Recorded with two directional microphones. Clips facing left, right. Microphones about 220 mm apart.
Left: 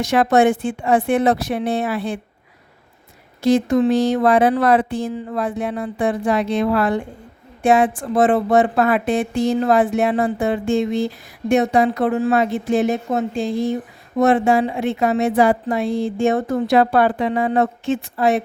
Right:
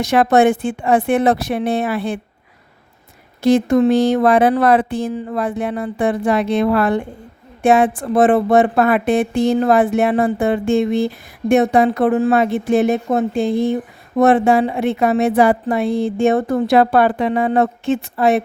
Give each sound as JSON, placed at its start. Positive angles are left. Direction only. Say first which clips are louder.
{"t": 0.0, "sound": "speech", "louder": "right 2 dB", "side_deg": -60}
{"t": 3.4, "sound": "speech", "louder": "right 3 dB", "side_deg": -60}